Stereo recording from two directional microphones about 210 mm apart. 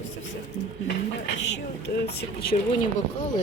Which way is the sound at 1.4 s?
55° left (ahead or behind).